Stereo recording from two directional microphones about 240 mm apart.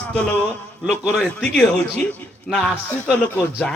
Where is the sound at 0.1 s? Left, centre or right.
Centre.